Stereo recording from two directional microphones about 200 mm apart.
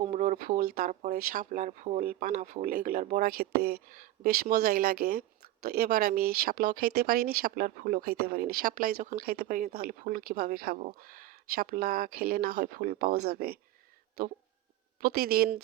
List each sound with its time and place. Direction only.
0.1 s speech: 35° right (ahead or behind)
15.0 s speech: 50° right (ahead or behind)